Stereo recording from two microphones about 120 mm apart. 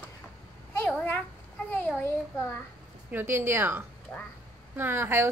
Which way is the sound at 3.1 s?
20° right (ahead or behind).